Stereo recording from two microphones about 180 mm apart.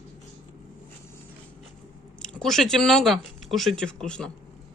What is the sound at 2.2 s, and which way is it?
Speech, 5° left (ahead or behind).